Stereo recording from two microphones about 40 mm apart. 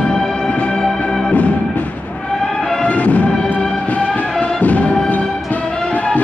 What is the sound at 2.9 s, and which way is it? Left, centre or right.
Music, left.